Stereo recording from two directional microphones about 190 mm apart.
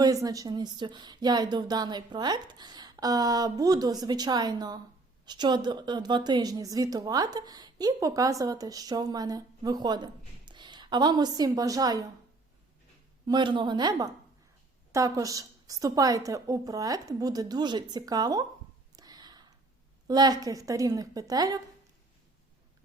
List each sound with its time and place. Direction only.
0.0 s a woman's voice: 20° right (ahead or behind)
13.2 s a woman's voice: 25° right (ahead or behind)
18.9 s whispering: 20° right (ahead or behind)
20.1 s a woman's voice: 20° right (ahead or behind)